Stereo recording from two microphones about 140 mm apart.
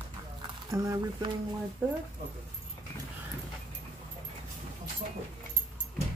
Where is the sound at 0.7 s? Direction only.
25° right (ahead or behind).